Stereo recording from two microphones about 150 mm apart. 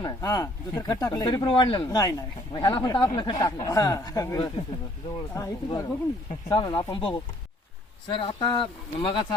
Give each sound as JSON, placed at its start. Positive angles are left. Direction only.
{"t": 0.0, "sound": "speech", "side_deg": 25}
{"t": 2.0, "sound": "speech", "side_deg": 25}